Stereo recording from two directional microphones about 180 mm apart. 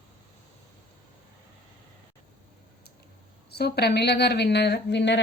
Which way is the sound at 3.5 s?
65° left (ahead or behind).